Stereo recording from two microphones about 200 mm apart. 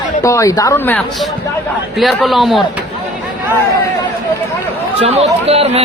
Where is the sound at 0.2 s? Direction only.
15° left (ahead or behind); by 2.8 s centre (ahead or behind).